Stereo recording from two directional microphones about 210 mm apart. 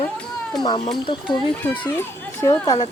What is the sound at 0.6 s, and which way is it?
Speech, 20° left (ahead or behind).